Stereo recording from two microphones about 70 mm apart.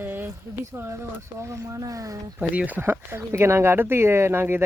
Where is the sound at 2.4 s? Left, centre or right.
Right.